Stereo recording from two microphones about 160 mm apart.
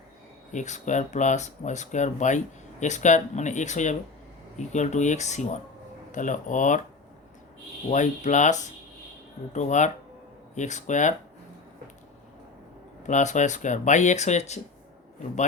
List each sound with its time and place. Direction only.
0.5 s speech: 50° left (ahead or behind)
7.9 s speech: 50° left (ahead or behind)
13.0 s speech: 50° left (ahead or behind)